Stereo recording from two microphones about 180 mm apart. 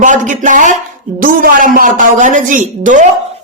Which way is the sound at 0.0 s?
45° right (ahead or behind).